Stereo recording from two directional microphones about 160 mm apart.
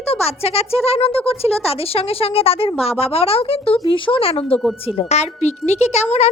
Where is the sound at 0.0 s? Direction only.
40° left (ahead or behind).